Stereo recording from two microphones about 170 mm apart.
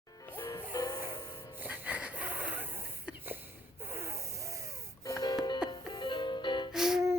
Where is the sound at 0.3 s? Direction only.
20° left (ahead or behind).